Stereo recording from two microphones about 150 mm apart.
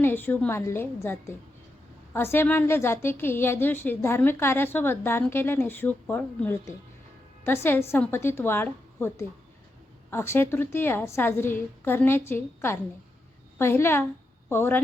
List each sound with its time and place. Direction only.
0.0 s a woman's voice: 15° left (ahead or behind)